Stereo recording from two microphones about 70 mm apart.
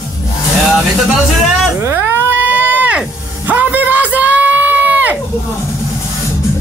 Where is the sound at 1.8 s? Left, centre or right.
Right.